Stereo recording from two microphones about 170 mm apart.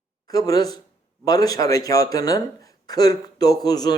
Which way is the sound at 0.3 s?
20° left (ahead or behind).